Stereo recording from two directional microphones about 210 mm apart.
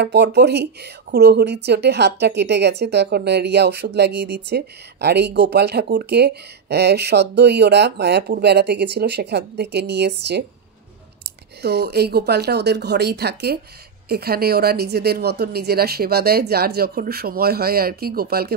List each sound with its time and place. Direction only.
0.0 s speech: 55° right (ahead or behind)
11.6 s speech: 50° right (ahead or behind)